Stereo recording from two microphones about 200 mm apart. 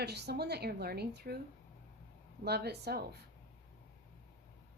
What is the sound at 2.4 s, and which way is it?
Speech, 55° right (ahead or behind).